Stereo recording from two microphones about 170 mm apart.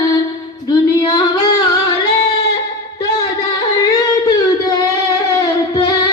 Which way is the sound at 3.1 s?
20° left (ahead or behind).